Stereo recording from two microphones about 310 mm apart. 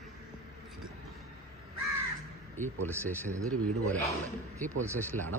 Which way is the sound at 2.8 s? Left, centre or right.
Centre.